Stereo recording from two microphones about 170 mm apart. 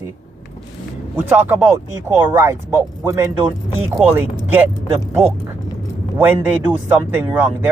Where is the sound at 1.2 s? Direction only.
10° right (ahead or behind).